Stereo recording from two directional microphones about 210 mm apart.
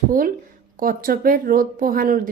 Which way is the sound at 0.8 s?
40° right (ahead or behind).